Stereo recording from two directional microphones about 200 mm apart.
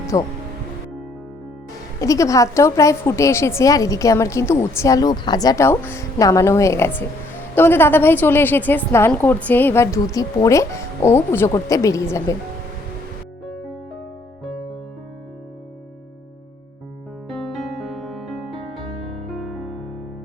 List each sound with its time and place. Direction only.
0.1 s a woman's voice: 15° left (ahead or behind)
2.0 s a woman's voice: 15° left (ahead or behind)
17.5 s music: centre (ahead or behind)